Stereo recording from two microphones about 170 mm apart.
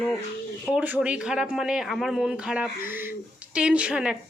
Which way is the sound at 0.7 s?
10° right (ahead or behind).